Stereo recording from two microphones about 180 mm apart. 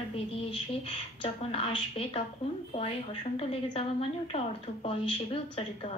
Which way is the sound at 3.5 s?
35° left (ahead or behind).